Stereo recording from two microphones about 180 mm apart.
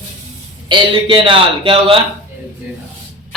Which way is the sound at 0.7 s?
30° right (ahead or behind).